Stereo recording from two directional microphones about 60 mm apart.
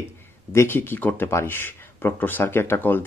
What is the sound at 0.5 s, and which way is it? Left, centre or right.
Speech, left.